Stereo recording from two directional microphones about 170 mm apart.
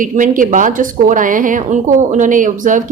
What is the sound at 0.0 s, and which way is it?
Speech, 50° right (ahead or behind).